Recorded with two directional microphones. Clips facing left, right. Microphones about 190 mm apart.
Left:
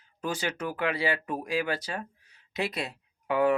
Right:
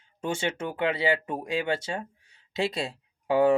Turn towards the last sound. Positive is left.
turn(degrees=-30)  # may be behind; listen again after turning